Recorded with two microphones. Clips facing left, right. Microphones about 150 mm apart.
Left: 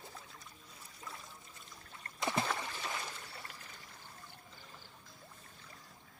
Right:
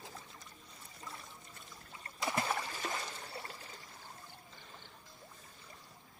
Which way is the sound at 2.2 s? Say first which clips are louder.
Left 1 dB; 20° left (ahead or behind).